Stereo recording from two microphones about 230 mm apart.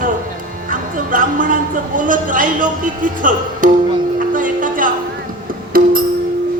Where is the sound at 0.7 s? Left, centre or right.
Right.